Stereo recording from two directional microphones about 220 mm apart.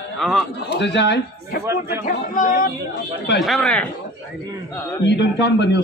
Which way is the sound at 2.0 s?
35° left (ahead or behind).